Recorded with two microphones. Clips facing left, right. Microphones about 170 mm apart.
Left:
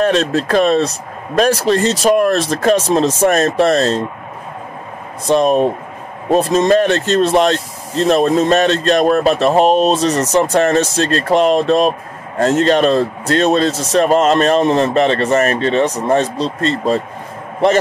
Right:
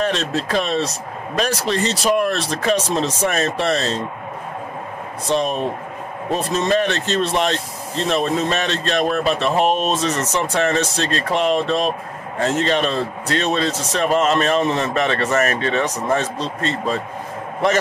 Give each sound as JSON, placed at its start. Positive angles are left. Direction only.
{"t": 0.0, "sound": "speech", "side_deg": 50}
{"t": 5.3, "sound": "a man's voice", "side_deg": 45}